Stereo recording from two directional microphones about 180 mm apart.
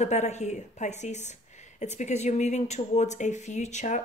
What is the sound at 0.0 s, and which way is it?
Speech, 40° left (ahead or behind).